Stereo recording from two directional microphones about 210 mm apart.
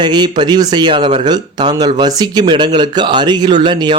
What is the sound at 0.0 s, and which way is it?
Speech, 20° right (ahead or behind).